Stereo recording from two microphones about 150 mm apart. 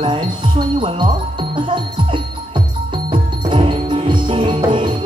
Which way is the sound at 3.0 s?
35° right (ahead or behind).